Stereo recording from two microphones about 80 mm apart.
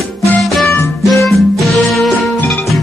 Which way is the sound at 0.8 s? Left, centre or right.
Left.